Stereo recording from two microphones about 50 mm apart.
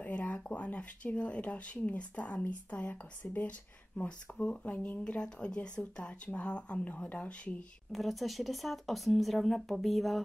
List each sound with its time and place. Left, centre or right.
0.0 s speech: left
4.4 s speech: left
7.9 s speech: centre